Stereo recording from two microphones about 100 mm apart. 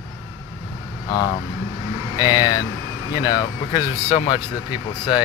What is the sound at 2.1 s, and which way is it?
Speech, 50° left (ahead or behind).